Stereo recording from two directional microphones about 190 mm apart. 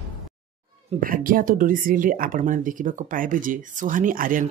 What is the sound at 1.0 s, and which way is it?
Speech, 45° right (ahead or behind).